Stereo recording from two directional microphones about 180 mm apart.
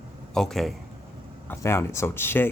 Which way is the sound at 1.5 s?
15° left (ahead or behind).